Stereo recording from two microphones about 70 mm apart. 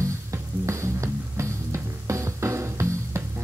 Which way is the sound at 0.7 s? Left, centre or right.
Right.